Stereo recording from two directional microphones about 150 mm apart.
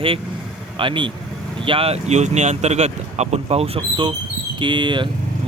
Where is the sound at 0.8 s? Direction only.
35° right (ahead or behind).